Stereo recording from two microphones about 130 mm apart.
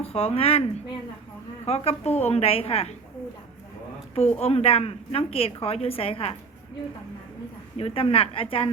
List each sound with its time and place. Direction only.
0.0 s speech: 50° left (ahead or behind)
1.6 s a woman's voice: 50° left (ahead or behind)
4.1 s a woman's voice: 50° left (ahead or behind)
7.8 s a woman's voice: 50° left (ahead or behind)